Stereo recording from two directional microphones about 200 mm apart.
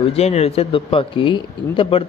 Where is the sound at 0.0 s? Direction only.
30° left (ahead or behind).